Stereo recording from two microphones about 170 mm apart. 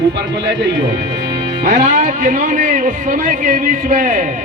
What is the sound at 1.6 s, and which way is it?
Speech, 45° right (ahead or behind).